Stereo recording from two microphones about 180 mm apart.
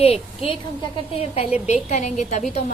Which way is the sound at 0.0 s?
35° left (ahead or behind).